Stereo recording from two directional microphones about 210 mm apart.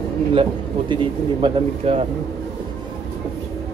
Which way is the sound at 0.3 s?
25° right (ahead or behind).